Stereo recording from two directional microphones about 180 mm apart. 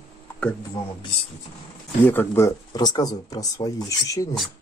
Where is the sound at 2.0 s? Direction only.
10° left (ahead or behind).